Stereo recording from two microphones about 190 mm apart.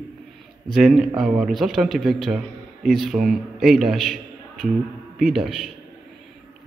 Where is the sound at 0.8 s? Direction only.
Centre (ahead or behind).